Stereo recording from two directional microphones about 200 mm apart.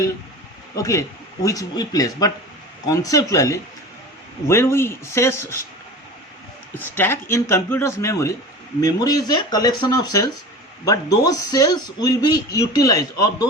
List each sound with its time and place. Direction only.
0.8 s speech: 15° left (ahead or behind)
6.7 s speech: 10° left (ahead or behind)